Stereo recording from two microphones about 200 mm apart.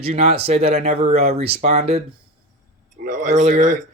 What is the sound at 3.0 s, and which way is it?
Speech, 40° right (ahead or behind).